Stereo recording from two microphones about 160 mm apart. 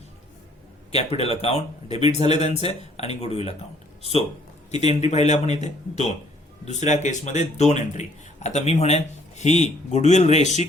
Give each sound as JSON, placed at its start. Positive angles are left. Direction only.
{"t": 0.9, "sound": "speech", "side_deg": 40}
{"t": 4.7, "sound": "speech", "side_deg": 45}